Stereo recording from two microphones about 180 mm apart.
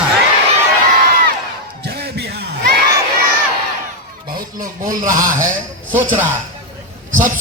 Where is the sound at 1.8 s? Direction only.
65° right (ahead or behind).